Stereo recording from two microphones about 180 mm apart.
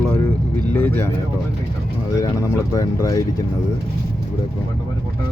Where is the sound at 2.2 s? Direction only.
20° left (ahead or behind).